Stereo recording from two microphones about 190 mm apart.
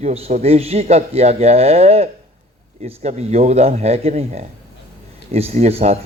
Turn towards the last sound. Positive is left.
turn(degrees=-35)  # may be behind; listen again after turning